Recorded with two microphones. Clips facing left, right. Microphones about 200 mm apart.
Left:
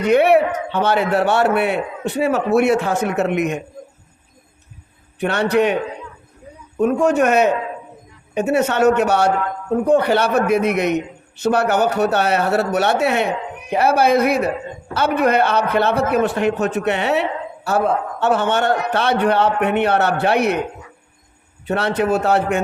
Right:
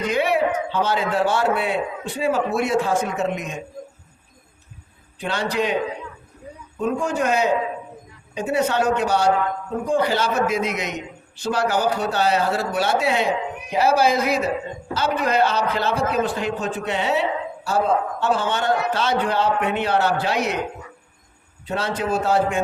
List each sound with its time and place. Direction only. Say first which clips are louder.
0.0 s a man's voice: left 7 dB; 60° left (ahead or behind)
5.2 s a man's voice: left 7 dB; 65° left (ahead or behind)
21.7 s a man's voice: left 5 dB; 65° left (ahead or behind)